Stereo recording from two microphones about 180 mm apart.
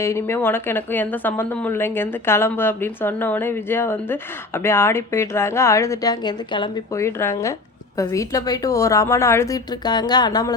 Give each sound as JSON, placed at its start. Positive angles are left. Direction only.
{"t": 0.0, "sound": "speech", "side_deg": 15}
{"t": 7.0, "sound": "speech", "side_deg": 15}